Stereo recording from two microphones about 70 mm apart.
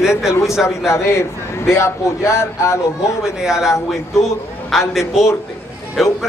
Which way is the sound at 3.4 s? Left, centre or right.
Centre.